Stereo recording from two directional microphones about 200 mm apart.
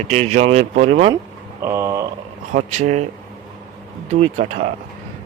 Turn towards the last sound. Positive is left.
turn(degrees=-30)  # may be behind; listen again after turning